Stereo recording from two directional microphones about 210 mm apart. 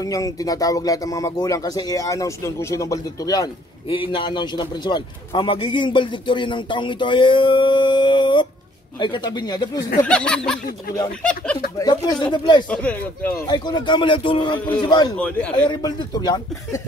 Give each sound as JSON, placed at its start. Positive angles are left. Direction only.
{"t": 0.0, "sound": "speech", "side_deg": 15}
{"t": 10.0, "sound": "a sound", "side_deg": 5}
{"t": 11.8, "sound": "speech", "side_deg": 20}
{"t": 12.6, "sound": "speech", "side_deg": 5}
{"t": 13.5, "sound": "speech", "side_deg": 20}
{"t": 15.1, "sound": "a sound", "side_deg": 5}
{"t": 15.7, "sound": "speech", "side_deg": 20}